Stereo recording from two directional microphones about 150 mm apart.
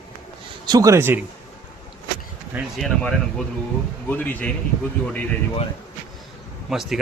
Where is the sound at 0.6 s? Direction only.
25° right (ahead or behind).